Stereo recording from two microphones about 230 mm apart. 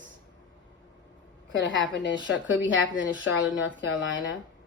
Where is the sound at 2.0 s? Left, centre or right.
Left.